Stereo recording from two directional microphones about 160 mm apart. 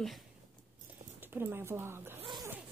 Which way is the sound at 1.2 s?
10° right (ahead or behind).